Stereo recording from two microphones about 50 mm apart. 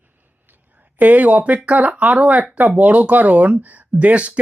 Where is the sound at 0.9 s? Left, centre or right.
Right.